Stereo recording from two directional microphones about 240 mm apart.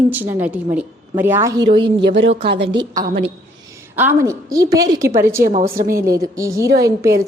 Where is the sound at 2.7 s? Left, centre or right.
Centre.